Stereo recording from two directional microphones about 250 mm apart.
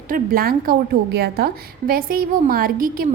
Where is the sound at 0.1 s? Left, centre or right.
Right.